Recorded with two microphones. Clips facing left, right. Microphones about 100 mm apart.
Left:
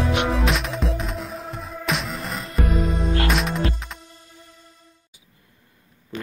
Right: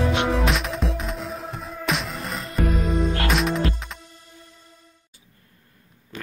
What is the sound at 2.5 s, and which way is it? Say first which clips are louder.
Music: right 1 dB; 30° left (ahead or behind).